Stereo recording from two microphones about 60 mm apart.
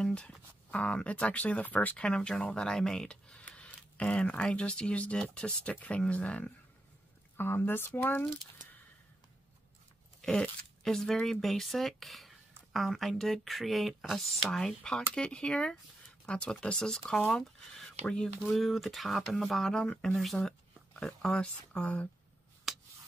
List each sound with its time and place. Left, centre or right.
0.0 s a sound: centre
0.7 s speech: left
2.0 s speech: centre
3.4 s speech: left
7.3 s speech: left
10.8 s speech: centre
18.5 s speech: centre; by 22.1 s left
22.7 s a sound: centre